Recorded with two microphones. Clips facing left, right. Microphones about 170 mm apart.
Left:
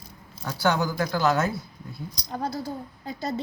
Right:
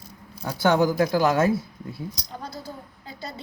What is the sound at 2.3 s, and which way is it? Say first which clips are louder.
Speech: left 6 dB; 55° left (ahead or behind).